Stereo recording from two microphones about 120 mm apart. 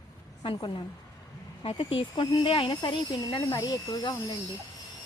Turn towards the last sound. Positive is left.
turn(degrees=30)  # may be behind; listen again after turning